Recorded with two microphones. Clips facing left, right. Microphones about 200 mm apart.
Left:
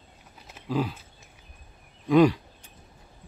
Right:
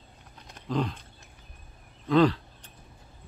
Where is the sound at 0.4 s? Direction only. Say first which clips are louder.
Left 1 dB; 5° left (ahead or behind).